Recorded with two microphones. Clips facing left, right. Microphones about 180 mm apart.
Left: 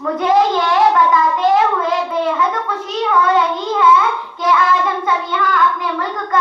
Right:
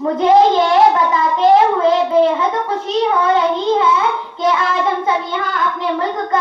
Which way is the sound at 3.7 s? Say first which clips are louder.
Left 1 dB; 25° right (ahead or behind).